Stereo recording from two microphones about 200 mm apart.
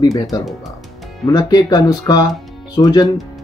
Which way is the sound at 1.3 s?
20° left (ahead or behind).